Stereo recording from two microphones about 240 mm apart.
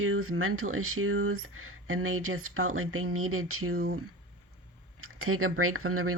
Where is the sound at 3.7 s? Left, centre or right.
Right.